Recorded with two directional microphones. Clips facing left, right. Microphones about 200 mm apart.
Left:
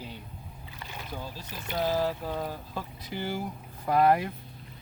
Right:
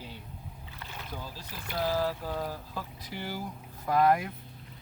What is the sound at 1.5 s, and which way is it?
Speech, 20° left (ahead or behind).